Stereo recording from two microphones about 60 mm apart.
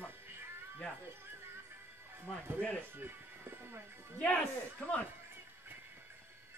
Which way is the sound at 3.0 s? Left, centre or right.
Right.